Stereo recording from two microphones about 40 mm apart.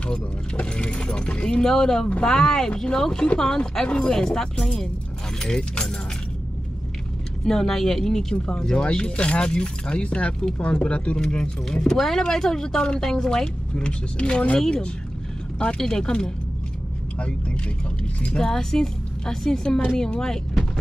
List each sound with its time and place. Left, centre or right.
0.7 s a woman's voice: left
3.9 s a woman's voice: left
7.4 s a woman's voice: centre
8.6 s speech: left
11.1 s a woman's voice: centre
15.8 s a woman's voice: centre
18.4 s a woman's voice: centre